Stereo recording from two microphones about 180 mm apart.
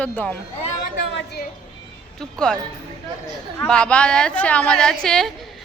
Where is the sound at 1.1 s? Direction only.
65° left (ahead or behind).